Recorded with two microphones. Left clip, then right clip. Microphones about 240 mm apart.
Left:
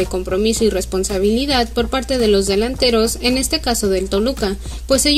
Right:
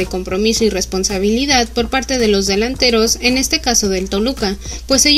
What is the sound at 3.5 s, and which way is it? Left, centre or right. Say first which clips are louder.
Speech: right 3 dB; right.